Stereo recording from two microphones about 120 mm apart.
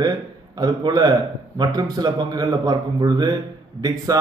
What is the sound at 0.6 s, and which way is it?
A man's voice, 35° right (ahead or behind).